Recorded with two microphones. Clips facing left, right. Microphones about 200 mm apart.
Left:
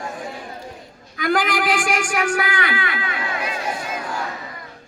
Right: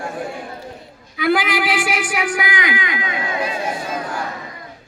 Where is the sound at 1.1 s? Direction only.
10° right (ahead or behind).